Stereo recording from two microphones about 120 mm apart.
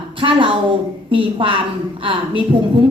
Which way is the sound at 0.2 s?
50° right (ahead or behind).